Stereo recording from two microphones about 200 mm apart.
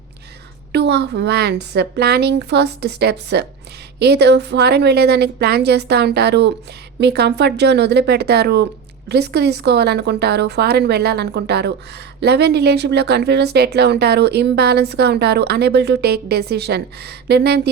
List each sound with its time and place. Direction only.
0.7 s a woman's voice: 55° right (ahead or behind)